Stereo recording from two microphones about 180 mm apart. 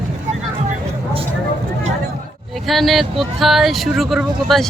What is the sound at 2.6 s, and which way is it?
Speech, centre (ahead or behind).